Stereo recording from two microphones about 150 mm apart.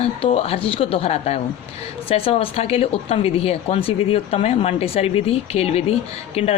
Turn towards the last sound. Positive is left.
turn(degrees=40)  # may be behind; listen again after turning